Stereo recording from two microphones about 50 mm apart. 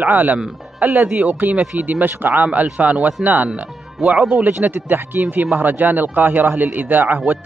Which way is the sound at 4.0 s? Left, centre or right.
Centre.